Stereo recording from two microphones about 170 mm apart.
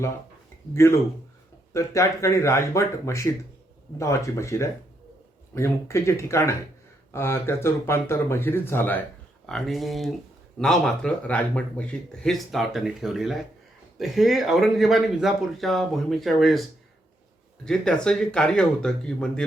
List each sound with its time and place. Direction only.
0.7 s speech: 15° left (ahead or behind)
17.7 s speech: 5° left (ahead or behind)